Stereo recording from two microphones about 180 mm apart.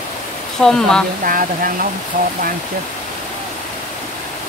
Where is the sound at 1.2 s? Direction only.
50° right (ahead or behind).